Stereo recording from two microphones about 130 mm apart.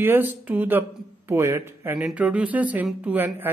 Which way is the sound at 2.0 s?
10° right (ahead or behind).